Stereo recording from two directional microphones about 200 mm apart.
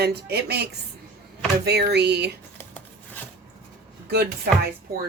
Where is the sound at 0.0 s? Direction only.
50° right (ahead or behind).